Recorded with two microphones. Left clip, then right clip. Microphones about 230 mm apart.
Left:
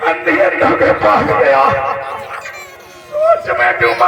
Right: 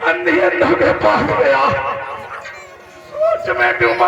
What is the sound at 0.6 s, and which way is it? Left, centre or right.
A man's voice, right.